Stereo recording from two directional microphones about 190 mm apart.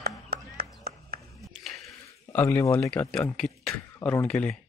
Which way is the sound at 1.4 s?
Centre (ahead or behind).